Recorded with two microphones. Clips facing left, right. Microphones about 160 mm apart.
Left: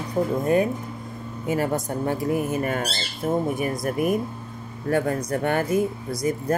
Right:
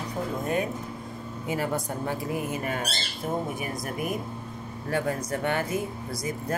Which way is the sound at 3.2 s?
55° left (ahead or behind).